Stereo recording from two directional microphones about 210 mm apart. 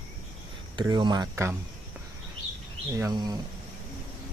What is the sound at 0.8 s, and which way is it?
Speech, 20° right (ahead or behind).